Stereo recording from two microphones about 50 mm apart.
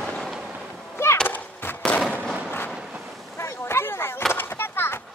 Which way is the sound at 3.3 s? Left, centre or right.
Left.